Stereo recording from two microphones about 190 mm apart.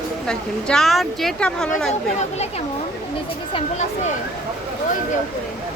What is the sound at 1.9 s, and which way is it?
Speech, 35° left (ahead or behind).